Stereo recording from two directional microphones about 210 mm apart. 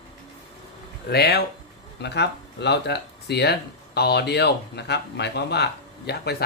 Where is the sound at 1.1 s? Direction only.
50° left (ahead or behind).